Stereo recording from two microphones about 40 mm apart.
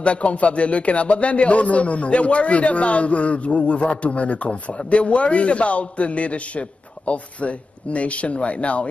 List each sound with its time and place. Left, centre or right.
0.0 s a man's voice: left